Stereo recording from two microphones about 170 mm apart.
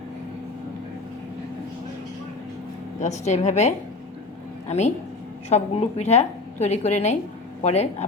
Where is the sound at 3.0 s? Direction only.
40° left (ahead or behind).